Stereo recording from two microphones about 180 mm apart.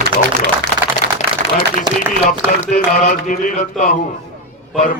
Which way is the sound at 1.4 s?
45° right (ahead or behind).